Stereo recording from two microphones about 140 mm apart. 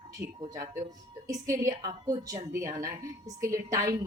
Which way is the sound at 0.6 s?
25° right (ahead or behind).